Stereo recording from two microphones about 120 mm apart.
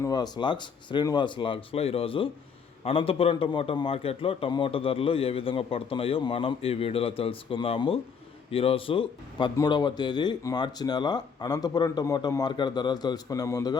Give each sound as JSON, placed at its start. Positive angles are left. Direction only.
{"t": 0.0, "sound": "a man's voice", "side_deg": 35}
{"t": 9.6, "sound": "speech", "side_deg": 40}